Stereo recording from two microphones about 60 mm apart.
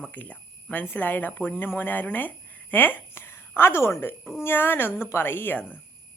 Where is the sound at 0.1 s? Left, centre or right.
Left.